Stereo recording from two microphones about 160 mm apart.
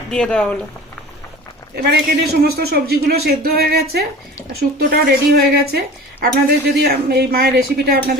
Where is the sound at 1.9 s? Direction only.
75° right (ahead or behind).